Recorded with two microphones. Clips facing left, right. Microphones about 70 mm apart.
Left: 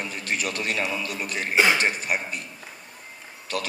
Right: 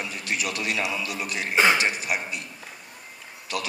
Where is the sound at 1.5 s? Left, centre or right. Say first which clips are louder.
Even; right.